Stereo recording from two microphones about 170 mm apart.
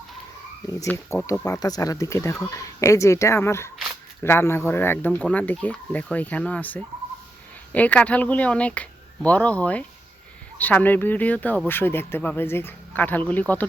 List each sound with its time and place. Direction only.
1.1 s speech: 15° left (ahead or behind)